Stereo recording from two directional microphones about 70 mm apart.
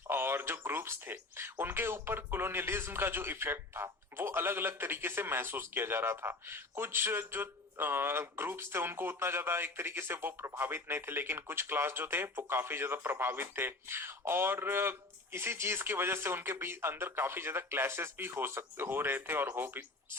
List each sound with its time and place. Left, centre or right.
0.1 s speech: right